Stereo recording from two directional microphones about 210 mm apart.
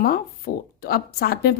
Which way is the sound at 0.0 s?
45° left (ahead or behind).